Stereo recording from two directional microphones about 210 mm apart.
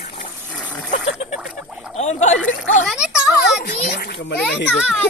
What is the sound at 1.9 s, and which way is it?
Gargling, 35° left (ahead or behind).